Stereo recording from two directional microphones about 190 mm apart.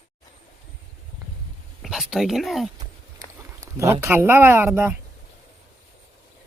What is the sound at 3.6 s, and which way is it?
Speech, 15° right (ahead or behind).